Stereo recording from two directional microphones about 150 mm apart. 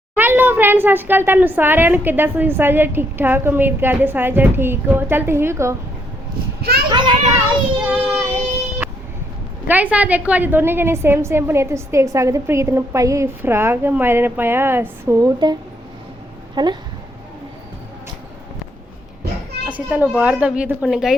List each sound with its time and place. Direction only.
0.2 s a woman's voice: 15° right (ahead or behind)
6.6 s a child's voice: 90° right
6.9 s a child's voice: 30° right (ahead or behind)
7.9 s child singing: 20° right (ahead or behind)
9.6 s a woman's voice: 10° right (ahead or behind); by 15.5 s 25° right (ahead or behind)
16.6 s a woman's voice: 30° right (ahead or behind)
19.7 s a woman's voice: 10° right (ahead or behind)